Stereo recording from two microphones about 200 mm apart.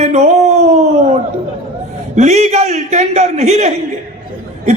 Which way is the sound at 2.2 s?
35° right (ahead or behind).